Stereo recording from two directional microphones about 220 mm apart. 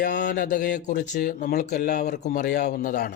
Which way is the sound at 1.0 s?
50° left (ahead or behind).